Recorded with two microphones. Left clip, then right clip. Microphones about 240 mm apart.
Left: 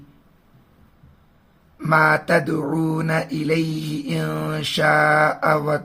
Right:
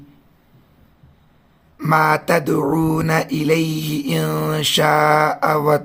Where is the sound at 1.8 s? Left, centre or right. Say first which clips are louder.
Right 1 dB; right.